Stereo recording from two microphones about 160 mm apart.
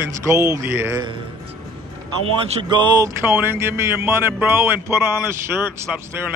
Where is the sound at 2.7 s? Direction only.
25° right (ahead or behind).